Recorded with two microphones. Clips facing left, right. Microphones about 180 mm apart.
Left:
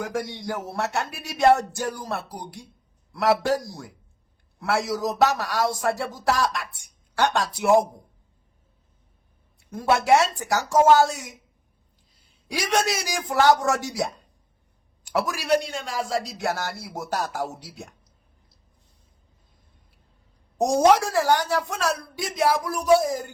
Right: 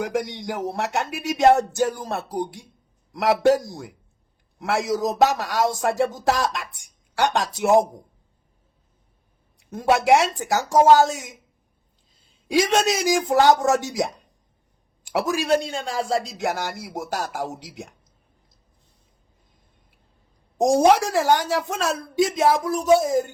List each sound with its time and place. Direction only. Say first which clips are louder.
0.0 s speech: right 3 dB; 15° right (ahead or behind)
9.6 s speech: right 2 dB; 15° right (ahead or behind)
12.5 s speech: right 5 dB; 20° right (ahead or behind)
15.1 s speech: right 2 dB; 20° right (ahead or behind)
20.8 s speech: left 2 dB; 20° right (ahead or behind)